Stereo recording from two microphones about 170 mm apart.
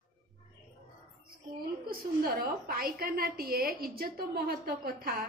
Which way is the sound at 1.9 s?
60° right (ahead or behind).